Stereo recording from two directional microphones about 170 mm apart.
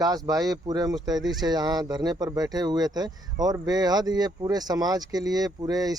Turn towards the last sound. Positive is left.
turn(degrees=-20)  # may be behind; listen again after turning